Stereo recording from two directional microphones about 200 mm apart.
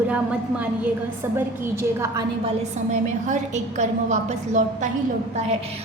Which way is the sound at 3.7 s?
35° right (ahead or behind).